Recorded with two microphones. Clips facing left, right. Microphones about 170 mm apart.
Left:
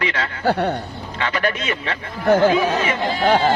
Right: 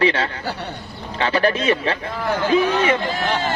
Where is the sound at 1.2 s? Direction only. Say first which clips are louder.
Right 4 dB; 30° right (ahead or behind).